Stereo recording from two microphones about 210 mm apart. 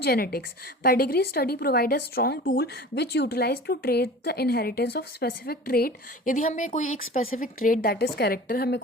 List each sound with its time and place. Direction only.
0.0 s a woman's voice: 50° left (ahead or behind)